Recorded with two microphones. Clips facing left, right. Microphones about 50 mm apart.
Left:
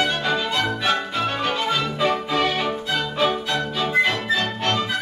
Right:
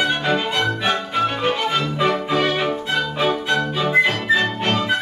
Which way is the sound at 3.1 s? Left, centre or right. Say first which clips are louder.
Right 1 dB; right.